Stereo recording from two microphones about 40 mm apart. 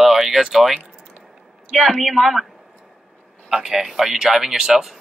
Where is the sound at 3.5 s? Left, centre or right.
Centre.